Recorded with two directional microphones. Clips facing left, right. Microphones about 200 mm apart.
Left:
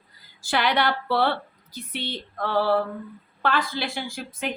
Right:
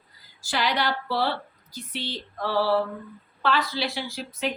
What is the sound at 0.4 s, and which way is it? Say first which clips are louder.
A woman's voice: left 3 dB; 55° left (ahead or behind).